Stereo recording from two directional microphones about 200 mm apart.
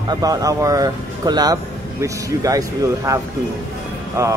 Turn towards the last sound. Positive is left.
turn(degrees=-15)  # may be behind; listen again after turning